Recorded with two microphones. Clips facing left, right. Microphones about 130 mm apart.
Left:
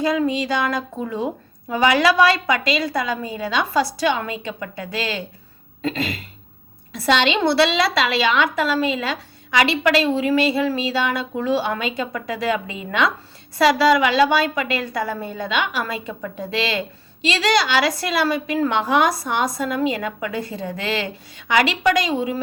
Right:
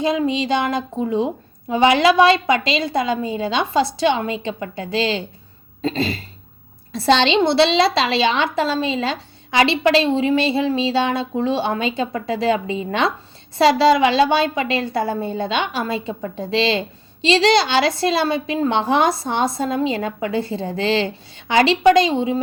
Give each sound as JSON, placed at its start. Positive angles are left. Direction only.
{"t": 0.0, "sound": "a woman's voice", "side_deg": -20}